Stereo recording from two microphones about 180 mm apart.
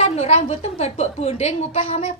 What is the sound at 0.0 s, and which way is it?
A woman's voice, 35° left (ahead or behind).